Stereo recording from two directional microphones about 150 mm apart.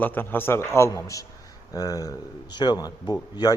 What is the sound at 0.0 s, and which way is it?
A man's voice, 10° left (ahead or behind).